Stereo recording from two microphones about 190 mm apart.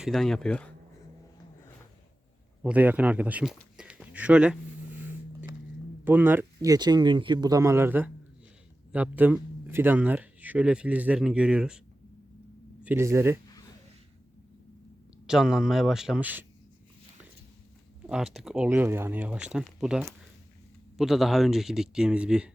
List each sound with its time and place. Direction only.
0.0 s speech: centre (ahead or behind)
2.6 s speech: 10° right (ahead or behind)
6.1 s speech: 10° right (ahead or behind)
12.8 s speech: 10° right (ahead or behind)
15.3 s speech: 5° right (ahead or behind)
18.0 s speech: 5° right (ahead or behind)